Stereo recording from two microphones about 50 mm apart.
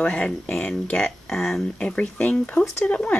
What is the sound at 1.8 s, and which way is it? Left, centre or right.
Speech, left.